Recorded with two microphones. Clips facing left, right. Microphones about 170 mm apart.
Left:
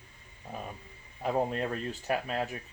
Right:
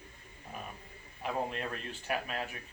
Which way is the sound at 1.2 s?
35° left (ahead or behind).